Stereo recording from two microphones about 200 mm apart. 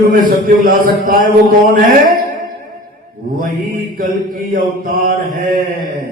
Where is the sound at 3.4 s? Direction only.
45° right (ahead or behind).